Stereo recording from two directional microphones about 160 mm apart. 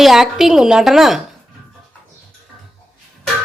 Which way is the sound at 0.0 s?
Centre (ahead or behind).